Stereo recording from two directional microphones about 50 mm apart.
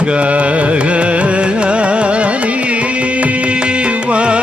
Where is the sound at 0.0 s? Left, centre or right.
Right.